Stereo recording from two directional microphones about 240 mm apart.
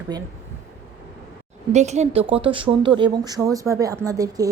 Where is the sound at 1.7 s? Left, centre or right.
Right.